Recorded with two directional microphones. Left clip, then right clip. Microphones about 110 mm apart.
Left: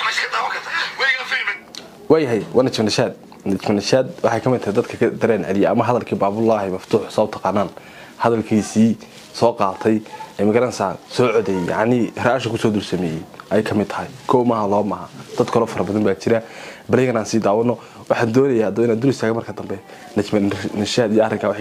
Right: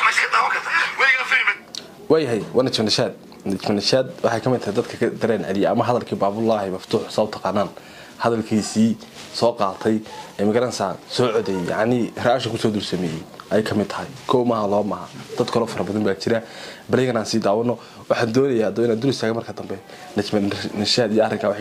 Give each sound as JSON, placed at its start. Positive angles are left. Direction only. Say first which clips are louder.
{"t": 0.0, "sound": "radio", "louder": "right 3 dB", "side_deg": -15}
{"t": 1.8, "sound": "speech", "louder": "left 6 dB", "side_deg": 40}